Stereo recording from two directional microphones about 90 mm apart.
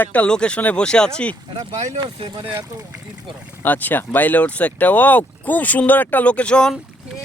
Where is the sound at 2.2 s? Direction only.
60° right (ahead or behind).